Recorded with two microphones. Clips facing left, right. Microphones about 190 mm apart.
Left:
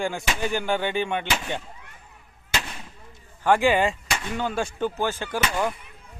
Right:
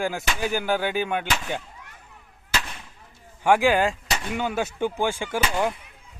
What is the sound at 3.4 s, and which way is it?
Speech, 5° right (ahead or behind).